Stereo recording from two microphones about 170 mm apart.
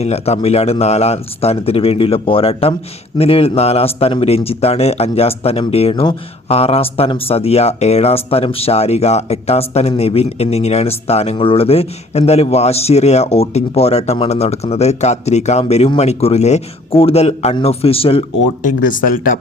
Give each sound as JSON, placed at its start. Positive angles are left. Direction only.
{"t": 0.0, "sound": "a man's voice", "side_deg": 40}
{"t": 18.8, "sound": "speech", "side_deg": 50}